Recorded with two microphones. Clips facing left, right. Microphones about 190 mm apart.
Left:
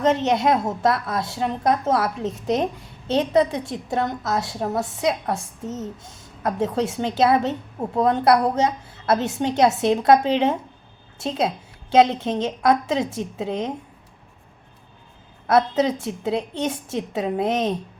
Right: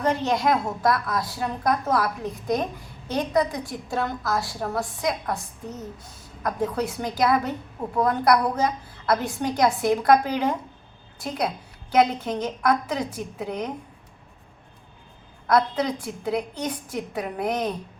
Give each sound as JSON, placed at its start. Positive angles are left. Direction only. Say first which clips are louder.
{"t": 0.0, "sound": "a woman's voice", "louder": "left 4 dB", "side_deg": 20}
{"t": 15.4, "sound": "a woman's voice", "louder": "left 3 dB", "side_deg": 25}